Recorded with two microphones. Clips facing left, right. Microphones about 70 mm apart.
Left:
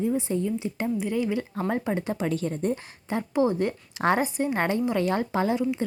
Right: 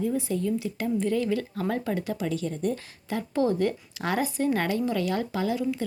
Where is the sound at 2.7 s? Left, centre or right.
Left.